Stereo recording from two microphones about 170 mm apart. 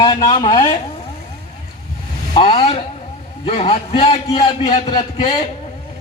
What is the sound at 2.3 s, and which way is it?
A man's voice, 35° left (ahead or behind).